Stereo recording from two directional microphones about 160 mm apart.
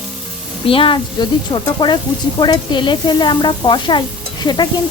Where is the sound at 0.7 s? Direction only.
35° left (ahead or behind).